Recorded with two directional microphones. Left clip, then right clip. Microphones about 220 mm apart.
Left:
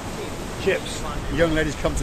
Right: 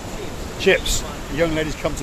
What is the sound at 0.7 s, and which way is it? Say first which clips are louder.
Speech: right 6 dB; 60° right (ahead or behind).